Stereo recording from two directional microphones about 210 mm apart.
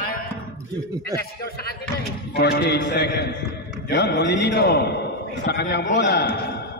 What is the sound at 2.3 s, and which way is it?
A man's voice, 50° left (ahead or behind).